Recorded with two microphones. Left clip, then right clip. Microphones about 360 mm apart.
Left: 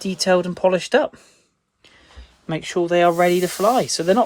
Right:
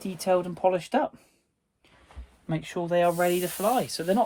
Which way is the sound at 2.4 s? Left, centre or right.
Left.